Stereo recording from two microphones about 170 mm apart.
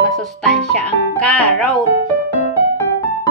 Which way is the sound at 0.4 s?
5° left (ahead or behind).